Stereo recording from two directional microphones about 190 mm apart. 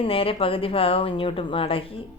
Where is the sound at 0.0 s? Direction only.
30° left (ahead or behind).